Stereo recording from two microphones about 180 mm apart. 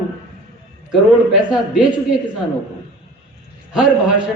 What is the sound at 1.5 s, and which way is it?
Speech, 5° right (ahead or behind).